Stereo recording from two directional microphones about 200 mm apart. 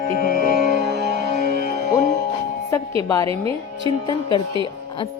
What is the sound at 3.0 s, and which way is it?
Speech, 15° left (ahead or behind).